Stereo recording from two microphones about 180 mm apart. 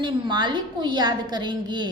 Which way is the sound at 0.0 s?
25° right (ahead or behind).